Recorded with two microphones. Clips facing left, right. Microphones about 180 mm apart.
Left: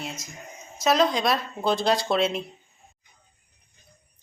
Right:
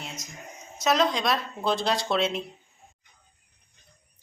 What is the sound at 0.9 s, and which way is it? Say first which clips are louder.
A woman's voice: left 2 dB; centre (ahead or behind).